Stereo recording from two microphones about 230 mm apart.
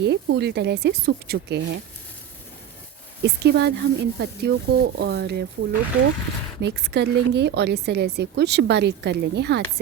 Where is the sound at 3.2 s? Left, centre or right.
Right.